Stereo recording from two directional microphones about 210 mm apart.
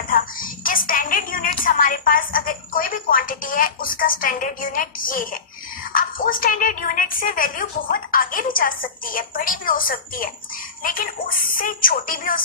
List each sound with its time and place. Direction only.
0.1 s a woman's voice: 40° left (ahead or behind)